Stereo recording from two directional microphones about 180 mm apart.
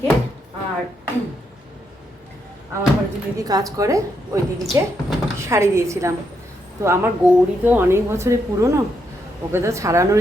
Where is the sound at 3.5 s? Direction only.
20° right (ahead or behind).